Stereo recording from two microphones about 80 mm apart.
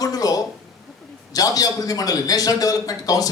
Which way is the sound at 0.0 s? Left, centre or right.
Left.